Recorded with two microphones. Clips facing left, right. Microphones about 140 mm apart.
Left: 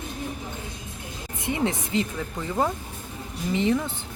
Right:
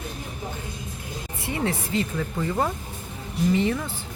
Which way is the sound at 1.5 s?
20° left (ahead or behind).